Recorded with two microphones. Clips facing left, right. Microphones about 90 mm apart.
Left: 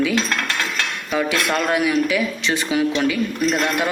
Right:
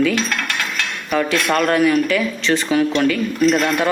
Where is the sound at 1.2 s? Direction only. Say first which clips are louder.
Right 3 dB; 5° left (ahead or behind).